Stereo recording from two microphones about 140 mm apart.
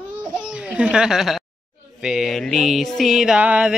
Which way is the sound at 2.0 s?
5° right (ahead or behind).